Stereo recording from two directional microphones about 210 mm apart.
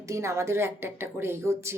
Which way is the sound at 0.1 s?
15° right (ahead or behind).